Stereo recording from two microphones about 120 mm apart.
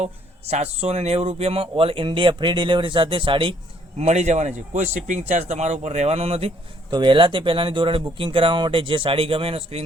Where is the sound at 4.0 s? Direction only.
75° right (ahead or behind).